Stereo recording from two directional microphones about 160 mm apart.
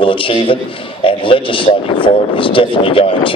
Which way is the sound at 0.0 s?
35° left (ahead or behind).